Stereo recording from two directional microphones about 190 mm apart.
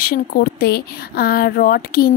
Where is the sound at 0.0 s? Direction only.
50° left (ahead or behind).